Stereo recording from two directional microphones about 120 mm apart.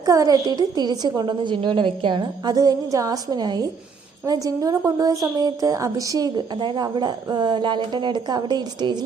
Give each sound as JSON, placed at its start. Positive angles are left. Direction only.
{"t": 0.0, "sound": "a woman's voice", "side_deg": -30}